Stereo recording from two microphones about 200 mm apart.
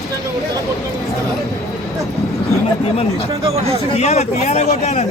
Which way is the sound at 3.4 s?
30° right (ahead or behind).